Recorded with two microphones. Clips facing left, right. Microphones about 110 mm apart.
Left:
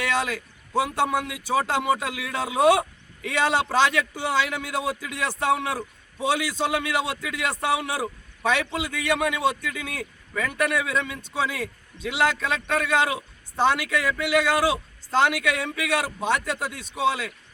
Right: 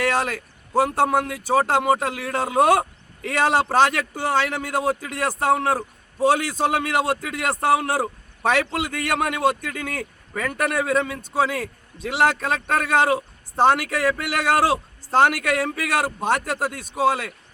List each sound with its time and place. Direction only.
0.0 s a man's voice: 45° right (ahead or behind)